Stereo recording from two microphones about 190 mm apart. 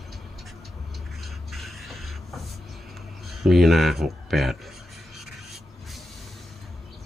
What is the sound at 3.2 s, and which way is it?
Speech, centre (ahead or behind).